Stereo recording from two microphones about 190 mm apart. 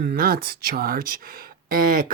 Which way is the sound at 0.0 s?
55° right (ahead or behind).